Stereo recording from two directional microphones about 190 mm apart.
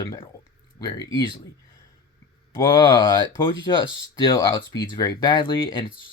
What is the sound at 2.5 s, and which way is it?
Speech, 25° left (ahead or behind).